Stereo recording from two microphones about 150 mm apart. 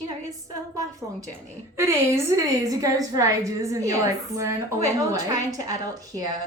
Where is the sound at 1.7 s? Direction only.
15° right (ahead or behind).